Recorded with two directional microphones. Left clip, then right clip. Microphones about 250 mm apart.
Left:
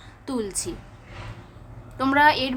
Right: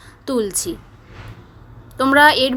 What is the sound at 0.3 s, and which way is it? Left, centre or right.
Speech, centre.